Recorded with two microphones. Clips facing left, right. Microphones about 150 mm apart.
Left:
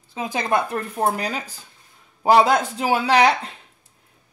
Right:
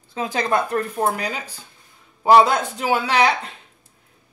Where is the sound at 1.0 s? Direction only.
35° left (ahead or behind).